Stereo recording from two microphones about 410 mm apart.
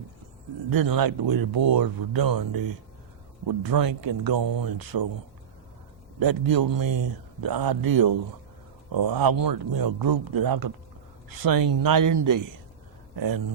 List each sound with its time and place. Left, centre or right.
0.7 s speech: right
6.1 s speech: right